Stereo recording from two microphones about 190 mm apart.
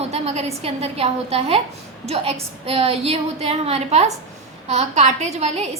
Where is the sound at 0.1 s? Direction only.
35° right (ahead or behind).